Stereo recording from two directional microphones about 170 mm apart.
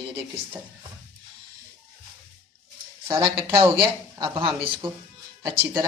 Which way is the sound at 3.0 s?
20° right (ahead or behind).